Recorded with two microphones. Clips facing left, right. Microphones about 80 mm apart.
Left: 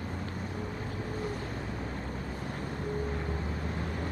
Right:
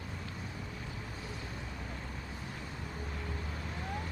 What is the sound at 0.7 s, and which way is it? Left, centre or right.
Vehicle, left.